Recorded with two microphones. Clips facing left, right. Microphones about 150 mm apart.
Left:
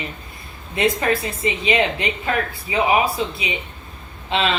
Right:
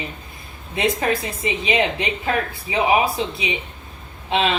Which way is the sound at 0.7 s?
20° right (ahead or behind).